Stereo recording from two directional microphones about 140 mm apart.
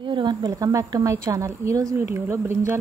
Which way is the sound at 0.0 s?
35° right (ahead or behind).